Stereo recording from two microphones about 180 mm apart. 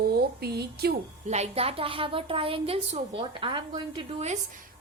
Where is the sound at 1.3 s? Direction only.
35° right (ahead or behind).